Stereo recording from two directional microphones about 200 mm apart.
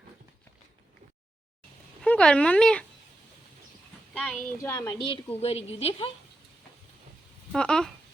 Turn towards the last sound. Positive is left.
turn(degrees=5)  # may be behind; listen again after turning